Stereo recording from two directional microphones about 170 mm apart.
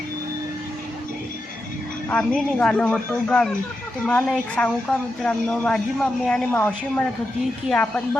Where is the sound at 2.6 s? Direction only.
10° left (ahead or behind).